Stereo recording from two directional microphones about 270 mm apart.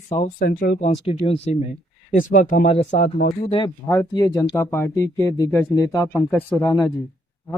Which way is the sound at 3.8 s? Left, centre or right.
Centre.